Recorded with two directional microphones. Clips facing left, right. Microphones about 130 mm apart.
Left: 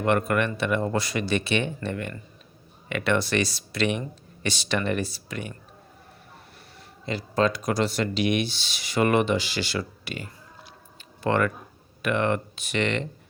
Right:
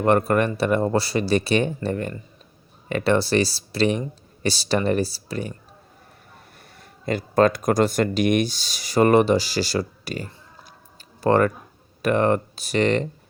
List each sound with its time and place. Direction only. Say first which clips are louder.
0.0 s speech: right 4 dB; 35° right (ahead or behind)
6.7 s speech: right 6 dB; 50° right (ahead or behind)